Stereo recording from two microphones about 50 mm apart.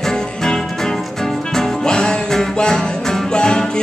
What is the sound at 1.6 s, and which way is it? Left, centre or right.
Music, centre.